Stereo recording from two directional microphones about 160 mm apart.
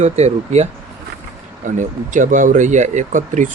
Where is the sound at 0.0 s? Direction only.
45° right (ahead or behind).